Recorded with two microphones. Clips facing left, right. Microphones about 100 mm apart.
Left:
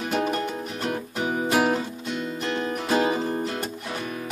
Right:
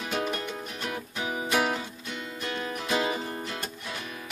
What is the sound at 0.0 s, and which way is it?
Music, 50° left (ahead or behind).